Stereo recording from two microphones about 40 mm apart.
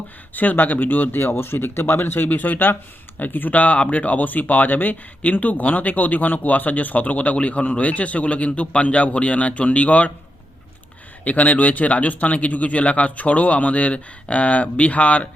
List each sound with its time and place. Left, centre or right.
0.3 s speech: left
1.2 s speech: left
11.3 s speech: left